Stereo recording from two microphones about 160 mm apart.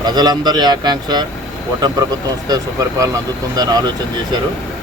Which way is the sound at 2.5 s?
20° right (ahead or behind).